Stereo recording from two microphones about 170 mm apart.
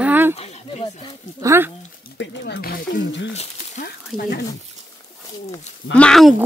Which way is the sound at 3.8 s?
60° left (ahead or behind).